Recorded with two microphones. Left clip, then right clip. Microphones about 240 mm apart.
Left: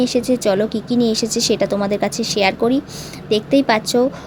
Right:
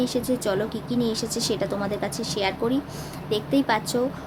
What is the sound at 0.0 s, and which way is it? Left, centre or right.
A woman's voice, left.